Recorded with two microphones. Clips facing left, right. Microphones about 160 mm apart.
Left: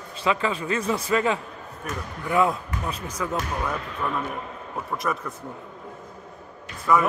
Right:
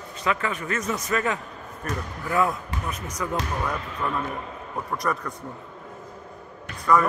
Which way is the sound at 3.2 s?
5° left (ahead or behind).